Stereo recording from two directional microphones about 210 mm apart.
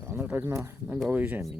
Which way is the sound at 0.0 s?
10° right (ahead or behind).